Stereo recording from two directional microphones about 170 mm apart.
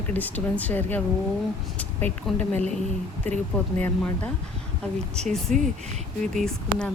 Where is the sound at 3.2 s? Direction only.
40° right (ahead or behind).